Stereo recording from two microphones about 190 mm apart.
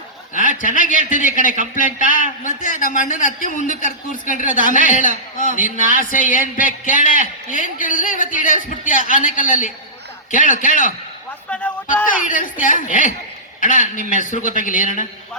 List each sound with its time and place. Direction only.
0.3 s a man's voice: 45° left (ahead or behind)
12.0 s a man's voice: 45° left (ahead or behind)